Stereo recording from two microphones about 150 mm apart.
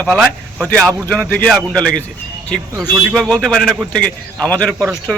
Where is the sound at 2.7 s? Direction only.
20° right (ahead or behind).